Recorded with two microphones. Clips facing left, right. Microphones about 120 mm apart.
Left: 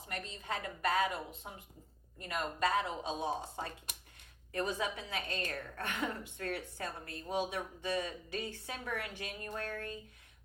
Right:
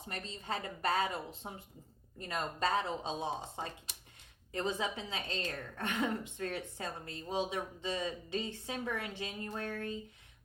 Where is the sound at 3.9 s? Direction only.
55° left (ahead or behind).